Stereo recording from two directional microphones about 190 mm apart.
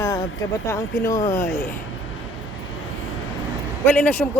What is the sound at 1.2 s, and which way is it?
Speech, 40° left (ahead or behind).